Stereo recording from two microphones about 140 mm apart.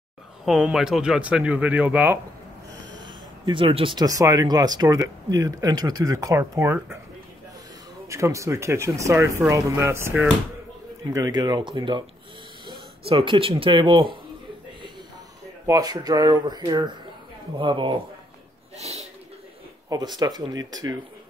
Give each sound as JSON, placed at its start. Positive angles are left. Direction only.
{"t": 0.5, "sound": "speech", "side_deg": -5}
{"t": 3.4, "sound": "speech", "side_deg": -40}
{"t": 8.1, "sound": "speech", "side_deg": -20}
{"t": 15.6, "sound": "speech", "side_deg": -25}
{"t": 18.8, "sound": "speech", "side_deg": -50}
{"t": 20.2, "sound": "speech", "side_deg": -30}